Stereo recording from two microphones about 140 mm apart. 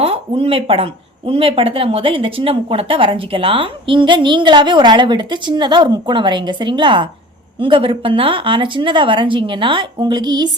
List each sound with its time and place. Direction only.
0.0 s speech: 45° right (ahead or behind)